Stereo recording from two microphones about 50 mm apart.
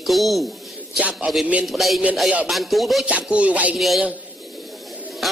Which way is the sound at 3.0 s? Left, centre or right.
Right.